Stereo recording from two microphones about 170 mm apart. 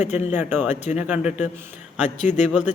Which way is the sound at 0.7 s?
45° left (ahead or behind).